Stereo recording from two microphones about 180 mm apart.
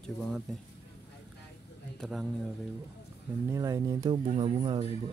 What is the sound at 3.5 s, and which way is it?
Speech, 20° right (ahead or behind).